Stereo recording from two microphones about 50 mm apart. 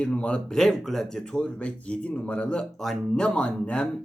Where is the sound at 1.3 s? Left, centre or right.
Left.